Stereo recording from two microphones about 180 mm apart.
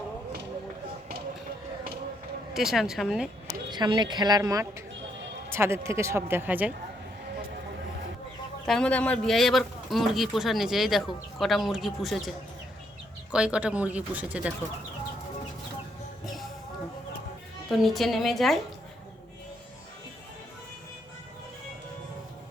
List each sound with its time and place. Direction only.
2.5 s a man's voice: centre (ahead or behind)
3.7 s speech: 25° right (ahead or behind)
8.6 s a man's voice: 5° left (ahead or behind)
13.3 s speech: 5° right (ahead or behind)
16.2 s music: centre (ahead or behind)
17.7 s a man's voice: centre (ahead or behind)